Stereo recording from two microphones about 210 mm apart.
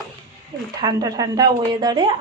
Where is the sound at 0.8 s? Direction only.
20° right (ahead or behind).